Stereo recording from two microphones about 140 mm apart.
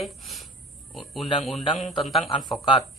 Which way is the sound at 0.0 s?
Centre (ahead or behind).